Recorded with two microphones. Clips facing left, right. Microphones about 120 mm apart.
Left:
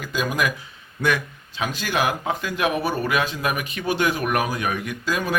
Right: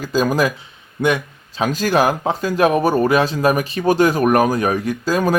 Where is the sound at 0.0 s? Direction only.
35° right (ahead or behind).